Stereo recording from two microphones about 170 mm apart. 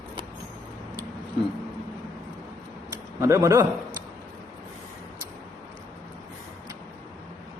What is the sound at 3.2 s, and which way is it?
Speech, 20° right (ahead or behind).